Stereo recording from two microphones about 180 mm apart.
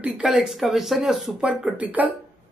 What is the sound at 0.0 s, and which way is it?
Speech, 5° right (ahead or behind).